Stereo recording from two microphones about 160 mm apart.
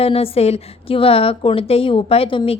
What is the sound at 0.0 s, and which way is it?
A woman's voice, 40° left (ahead or behind).